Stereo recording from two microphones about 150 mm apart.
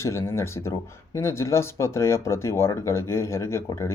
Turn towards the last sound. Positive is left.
turn(degrees=20)  # may be behind; listen again after turning